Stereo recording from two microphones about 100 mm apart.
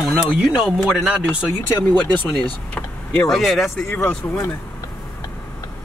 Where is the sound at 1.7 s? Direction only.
20° left (ahead or behind).